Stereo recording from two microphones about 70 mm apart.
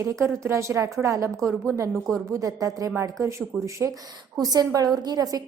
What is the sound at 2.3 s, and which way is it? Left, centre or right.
Speech, right.